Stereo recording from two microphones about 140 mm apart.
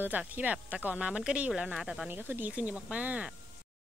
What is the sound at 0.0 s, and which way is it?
Speech, 10° right (ahead or behind).